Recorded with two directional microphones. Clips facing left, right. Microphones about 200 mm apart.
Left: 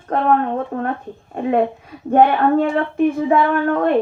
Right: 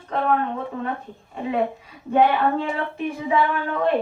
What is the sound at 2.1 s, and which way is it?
A woman's voice, 50° left (ahead or behind).